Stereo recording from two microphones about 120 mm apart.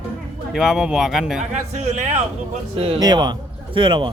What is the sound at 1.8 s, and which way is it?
Speech, 70° right (ahead or behind).